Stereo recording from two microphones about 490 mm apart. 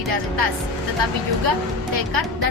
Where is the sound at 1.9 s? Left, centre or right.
Right.